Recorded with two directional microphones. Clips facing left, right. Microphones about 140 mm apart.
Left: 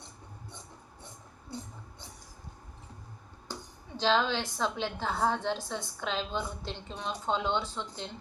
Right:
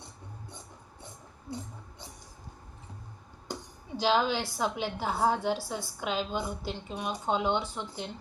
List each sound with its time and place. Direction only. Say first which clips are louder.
3.5 s speech: right 4 dB; 15° right (ahead or behind)